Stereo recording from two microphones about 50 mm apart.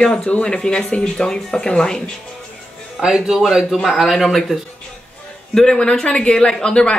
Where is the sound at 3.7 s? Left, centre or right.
Centre.